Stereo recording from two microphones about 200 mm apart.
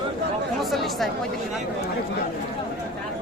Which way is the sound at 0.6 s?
Centre (ahead or behind).